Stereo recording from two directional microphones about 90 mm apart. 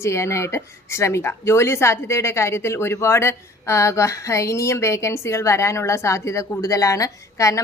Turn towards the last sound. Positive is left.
turn(degrees=35)  # may be behind; listen again after turning